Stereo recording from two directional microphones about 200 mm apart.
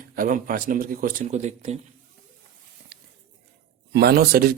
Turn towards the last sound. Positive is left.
turn(degrees=-50)  # may be behind; listen again after turning